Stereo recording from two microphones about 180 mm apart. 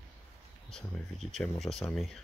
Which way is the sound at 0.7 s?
Centre (ahead or behind).